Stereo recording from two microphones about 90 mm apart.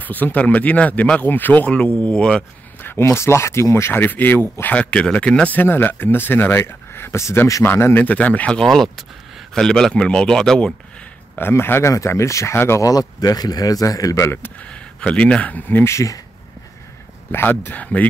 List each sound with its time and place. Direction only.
0.0 s speech: 20° left (ahead or behind)
2.8 s speech: 25° left (ahead or behind)
7.6 s speech: 25° left (ahead or behind)
8.5 s speech: 5° left (ahead or behind)
11.3 s a man's voice: 25° left (ahead or behind)
12.8 s a man's voice: 45° left (ahead or behind); by 14.5 s 25° left (ahead or behind)
14.6 s speech: 15° left (ahead or behind); by 16.2 s 35° left (ahead or behind)
17.3 s speech: 20° left (ahead or behind)